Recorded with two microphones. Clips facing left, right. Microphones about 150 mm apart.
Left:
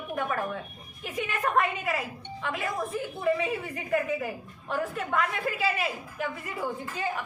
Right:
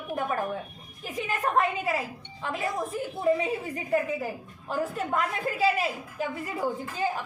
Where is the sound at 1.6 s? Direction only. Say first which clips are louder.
Right 1 dB; 30° right (ahead or behind).